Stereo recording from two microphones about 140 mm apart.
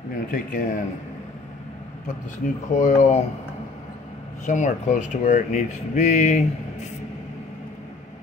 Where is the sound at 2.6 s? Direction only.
55° left (ahead or behind).